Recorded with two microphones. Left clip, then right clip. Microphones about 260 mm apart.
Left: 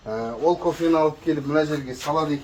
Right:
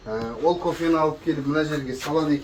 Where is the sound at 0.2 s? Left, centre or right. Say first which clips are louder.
Left 1 dB; left.